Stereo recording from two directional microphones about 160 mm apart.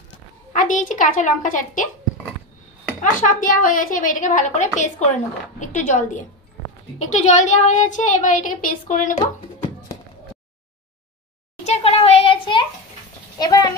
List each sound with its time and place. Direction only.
0.5 s a woman's voice: 50° left (ahead or behind)
3.0 s a woman's voice: 55° left (ahead or behind)
11.6 s a sound: 40° left (ahead or behind); by 13.7 s 25° left (ahead or behind)